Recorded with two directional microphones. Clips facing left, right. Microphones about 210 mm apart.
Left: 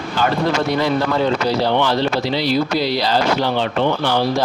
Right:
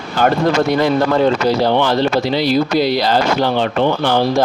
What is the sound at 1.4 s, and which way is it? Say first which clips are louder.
Speech: right 3 dB; 50° right (ahead or behind).